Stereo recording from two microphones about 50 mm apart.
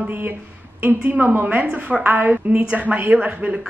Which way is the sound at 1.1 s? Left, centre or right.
Right.